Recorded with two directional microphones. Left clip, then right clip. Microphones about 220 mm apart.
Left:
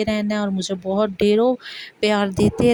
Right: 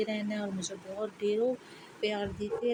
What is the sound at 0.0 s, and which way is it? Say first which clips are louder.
Speech: left 11 dB; 50° left (ahead or behind).